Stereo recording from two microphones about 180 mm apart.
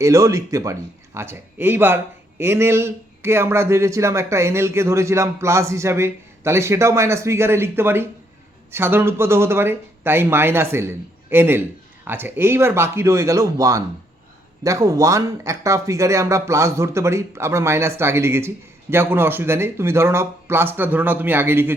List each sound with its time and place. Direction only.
0.0 s speech: 15° right (ahead or behind)